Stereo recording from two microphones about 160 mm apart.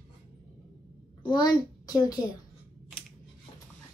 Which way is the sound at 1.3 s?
25° left (ahead or behind).